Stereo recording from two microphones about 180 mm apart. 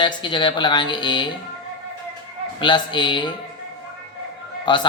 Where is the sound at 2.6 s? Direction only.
25° left (ahead or behind).